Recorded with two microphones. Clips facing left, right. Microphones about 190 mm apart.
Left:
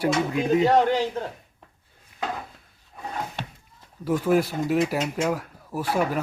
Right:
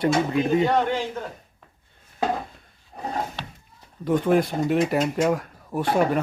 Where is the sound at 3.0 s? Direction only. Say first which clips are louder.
Right 4 dB; 35° right (ahead or behind).